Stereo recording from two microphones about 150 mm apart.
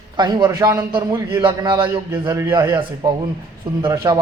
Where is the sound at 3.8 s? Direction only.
30° right (ahead or behind).